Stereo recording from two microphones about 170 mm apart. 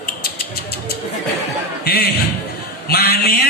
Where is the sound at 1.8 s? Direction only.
65° left (ahead or behind).